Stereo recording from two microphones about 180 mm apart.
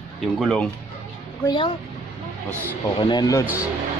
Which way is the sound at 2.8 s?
25° left (ahead or behind).